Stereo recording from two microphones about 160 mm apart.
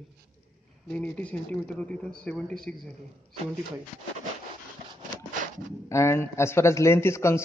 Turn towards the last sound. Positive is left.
turn(degrees=15)  # may be behind; listen again after turning